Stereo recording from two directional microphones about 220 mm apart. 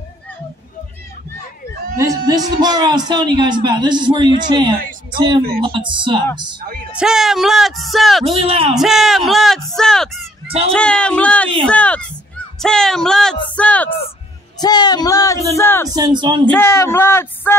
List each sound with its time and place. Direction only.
2.0 s a man's voice: 15° right (ahead or behind)
7.0 s speech: centre (ahead or behind)
8.4 s a man's voice: 25° right (ahead or behind)
8.7 s speech: centre (ahead or behind)
14.6 s speech: 20° left (ahead or behind)
15.9 s a man's voice: 20° right (ahead or behind)
16.4 s speech: 10° left (ahead or behind)